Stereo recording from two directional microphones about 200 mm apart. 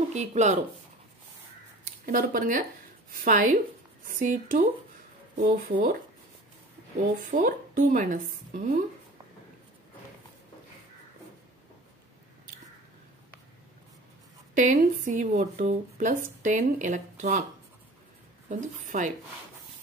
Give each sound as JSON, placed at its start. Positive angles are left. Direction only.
{"t": 0.1, "sound": "speech", "side_deg": -35}
{"t": 2.0, "sound": "speech", "side_deg": -45}
{"t": 7.2, "sound": "speech", "side_deg": -40}
{"t": 14.5, "sound": "speech", "side_deg": -40}
{"t": 18.5, "sound": "speech", "side_deg": -40}